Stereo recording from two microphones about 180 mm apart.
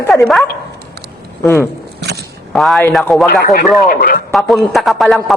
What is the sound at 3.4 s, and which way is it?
Speech, 55° left (ahead or behind).